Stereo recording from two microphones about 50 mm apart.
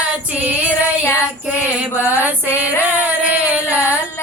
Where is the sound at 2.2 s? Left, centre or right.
Right.